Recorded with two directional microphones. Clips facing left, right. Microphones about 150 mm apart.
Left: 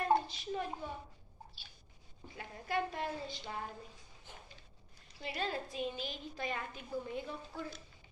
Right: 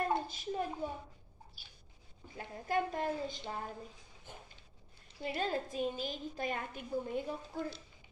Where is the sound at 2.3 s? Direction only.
45° right (ahead or behind).